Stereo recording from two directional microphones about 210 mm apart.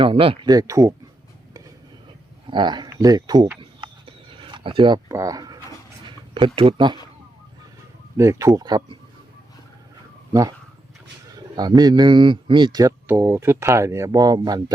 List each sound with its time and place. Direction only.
0.0 s speech: 25° right (ahead or behind)
2.5 s speech: 20° right (ahead or behind)
3.6 s a sound: 25° right (ahead or behind)
6.6 s speech: 25° right (ahead or behind)
8.1 s speech: 15° right (ahead or behind)
11.3 s speech: 20° right (ahead or behind)